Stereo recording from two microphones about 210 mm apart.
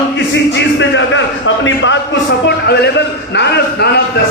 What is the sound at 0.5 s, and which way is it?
Music, 60° left (ahead or behind).